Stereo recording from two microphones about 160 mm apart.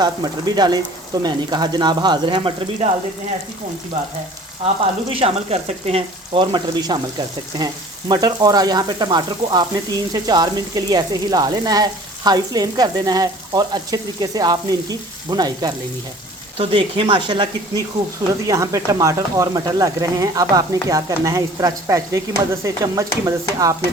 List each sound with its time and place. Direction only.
0.0 s frying: 25° right (ahead or behind)
5.2 s speech: 40° right (ahead or behind)
7.6 s frying: 25° right (ahead or behind)